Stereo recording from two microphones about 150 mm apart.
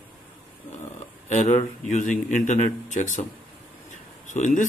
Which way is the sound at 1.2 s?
50° left (ahead or behind).